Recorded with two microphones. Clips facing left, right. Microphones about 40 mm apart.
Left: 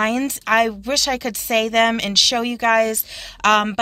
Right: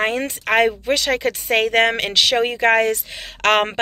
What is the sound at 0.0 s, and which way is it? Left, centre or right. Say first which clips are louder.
Speech: left 1 dB; right.